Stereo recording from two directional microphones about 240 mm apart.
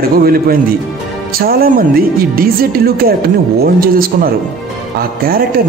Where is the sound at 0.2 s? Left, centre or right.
Right.